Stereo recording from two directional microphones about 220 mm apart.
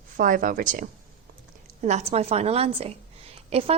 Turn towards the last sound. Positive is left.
turn(degrees=-25)  # may be behind; listen again after turning